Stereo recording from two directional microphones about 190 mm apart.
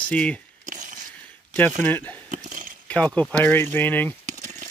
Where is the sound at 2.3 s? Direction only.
45° right (ahead or behind).